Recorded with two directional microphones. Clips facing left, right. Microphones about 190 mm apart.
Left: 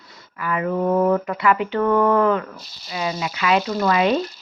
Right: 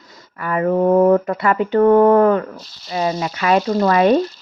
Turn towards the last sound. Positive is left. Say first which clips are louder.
# right 5 dB
turn(degrees=-45)  # may be behind; listen again after turning